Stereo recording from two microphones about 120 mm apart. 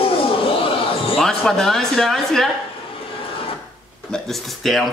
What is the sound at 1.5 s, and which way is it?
Speech, 5° left (ahead or behind).